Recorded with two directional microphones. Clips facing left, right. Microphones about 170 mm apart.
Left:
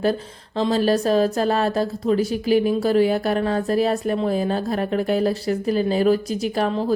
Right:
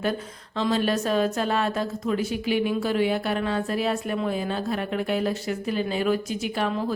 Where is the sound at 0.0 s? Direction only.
35° left (ahead or behind).